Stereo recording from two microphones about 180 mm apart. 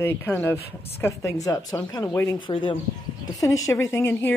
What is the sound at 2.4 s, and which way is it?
Speech, 25° left (ahead or behind).